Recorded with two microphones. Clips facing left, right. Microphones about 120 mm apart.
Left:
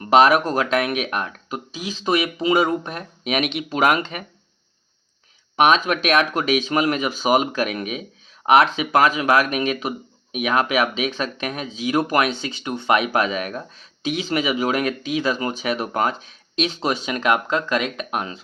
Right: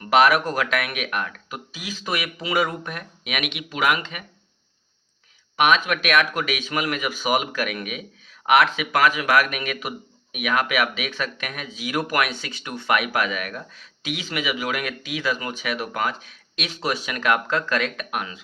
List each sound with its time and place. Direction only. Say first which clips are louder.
0.0 s speech: left 3 dB; 30° left (ahead or behind)
5.5 s speech: left 3 dB; 30° left (ahead or behind)